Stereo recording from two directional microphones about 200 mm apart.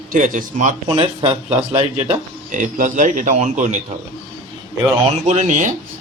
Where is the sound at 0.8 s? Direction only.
30° right (ahead or behind).